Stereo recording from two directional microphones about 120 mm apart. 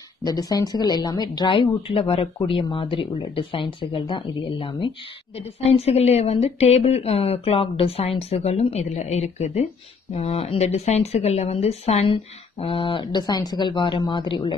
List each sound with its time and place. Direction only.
0.2 s a woman's voice: 30° left (ahead or behind)